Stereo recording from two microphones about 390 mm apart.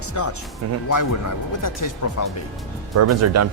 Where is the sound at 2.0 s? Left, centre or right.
Left.